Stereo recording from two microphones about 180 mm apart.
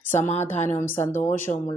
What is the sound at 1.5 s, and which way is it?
Speech, 25° left (ahead or behind).